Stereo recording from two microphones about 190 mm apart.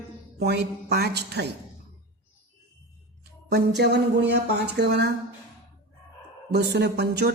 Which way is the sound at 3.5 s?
60° right (ahead or behind).